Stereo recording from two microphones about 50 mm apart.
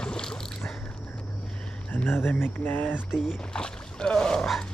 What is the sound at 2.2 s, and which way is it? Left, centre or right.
Speech, left.